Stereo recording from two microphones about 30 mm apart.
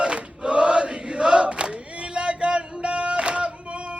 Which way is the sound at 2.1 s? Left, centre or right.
Right.